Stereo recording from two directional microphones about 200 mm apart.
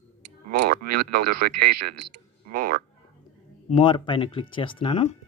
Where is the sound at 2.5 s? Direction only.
45° right (ahead or behind).